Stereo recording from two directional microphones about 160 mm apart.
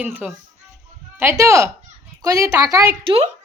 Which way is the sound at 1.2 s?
15° right (ahead or behind).